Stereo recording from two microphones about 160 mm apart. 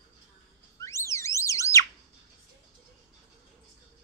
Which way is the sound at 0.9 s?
20° left (ahead or behind).